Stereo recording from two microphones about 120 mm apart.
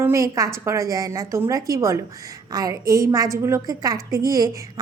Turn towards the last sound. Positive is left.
turn(degrees=-30)  # may be behind; listen again after turning